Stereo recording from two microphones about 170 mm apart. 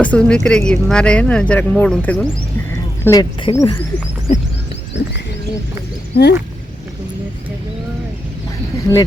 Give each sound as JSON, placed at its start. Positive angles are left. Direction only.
{"t": 0.0, "sound": "speech", "side_deg": 5}
{"t": 3.0, "sound": "speech", "side_deg": 20}
{"t": 4.9, "sound": "bird", "side_deg": 90}
{"t": 6.1, "sound": "speech", "side_deg": 70}
{"t": 8.9, "sound": "speech", "side_deg": 20}